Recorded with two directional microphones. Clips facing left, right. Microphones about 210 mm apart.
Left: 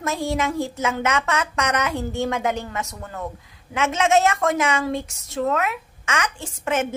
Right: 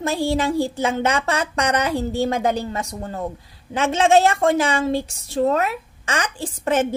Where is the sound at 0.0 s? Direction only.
30° right (ahead or behind).